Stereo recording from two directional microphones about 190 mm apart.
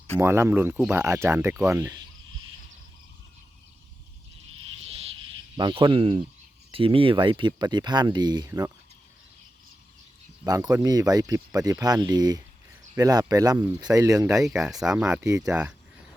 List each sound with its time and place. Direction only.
0.2 s speech: 15° right (ahead or behind)
5.5 s speech: 25° right (ahead or behind)
10.4 s speech: 20° right (ahead or behind)
14.4 s speech: centre (ahead or behind)